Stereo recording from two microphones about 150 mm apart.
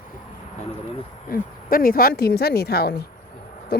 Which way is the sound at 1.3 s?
70° left (ahead or behind).